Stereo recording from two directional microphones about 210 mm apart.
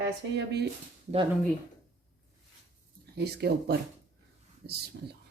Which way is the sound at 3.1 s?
50° right (ahead or behind).